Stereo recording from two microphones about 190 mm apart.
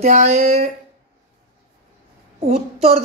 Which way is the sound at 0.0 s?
35° right (ahead or behind).